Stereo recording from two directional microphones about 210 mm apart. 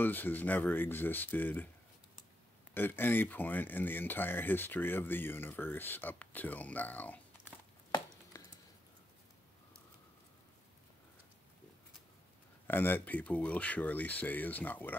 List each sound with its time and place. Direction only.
0.0 s speech: 10° left (ahead or behind)
2.7 s speech: 10° left (ahead or behind)
8.3 s a sound: 15° left (ahead or behind)
12.6 s speech: 10° left (ahead or behind)